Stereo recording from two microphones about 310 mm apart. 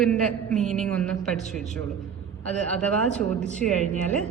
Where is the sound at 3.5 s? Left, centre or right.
Right.